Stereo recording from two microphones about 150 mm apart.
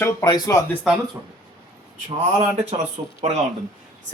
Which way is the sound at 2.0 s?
45° right (ahead or behind).